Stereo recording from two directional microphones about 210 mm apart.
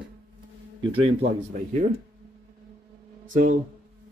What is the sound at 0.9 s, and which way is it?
Speech, 25° right (ahead or behind).